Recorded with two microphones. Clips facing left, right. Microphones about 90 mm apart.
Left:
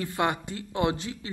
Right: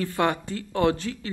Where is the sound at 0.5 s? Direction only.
20° left (ahead or behind).